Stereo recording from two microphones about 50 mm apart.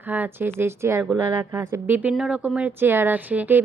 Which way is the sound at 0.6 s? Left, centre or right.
Right.